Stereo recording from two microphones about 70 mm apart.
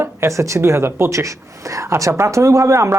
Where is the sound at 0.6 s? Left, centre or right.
Right.